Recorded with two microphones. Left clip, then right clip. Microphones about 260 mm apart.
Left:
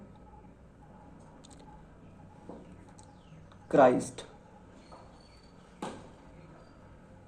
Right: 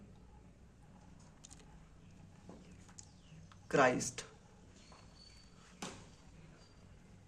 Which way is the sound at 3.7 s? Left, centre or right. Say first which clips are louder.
Left 8 dB; right.